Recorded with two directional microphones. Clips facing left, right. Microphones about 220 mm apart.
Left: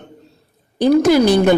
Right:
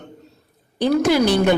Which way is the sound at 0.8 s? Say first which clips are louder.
Left 5 dB; 45° left (ahead or behind).